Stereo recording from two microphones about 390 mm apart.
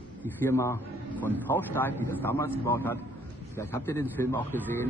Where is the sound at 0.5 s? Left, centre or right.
Centre.